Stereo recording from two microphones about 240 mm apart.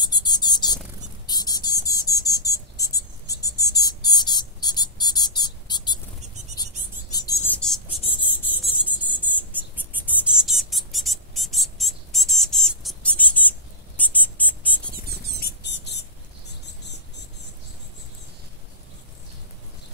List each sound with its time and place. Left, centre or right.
0.0 s a sound: centre
1.2 s cricket: centre
6.5 s bird: centre
8.8 s cricket: centre
15.4 s mouse: left